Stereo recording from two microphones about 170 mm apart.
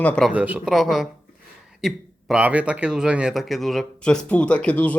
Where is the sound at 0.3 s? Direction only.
10° right (ahead or behind).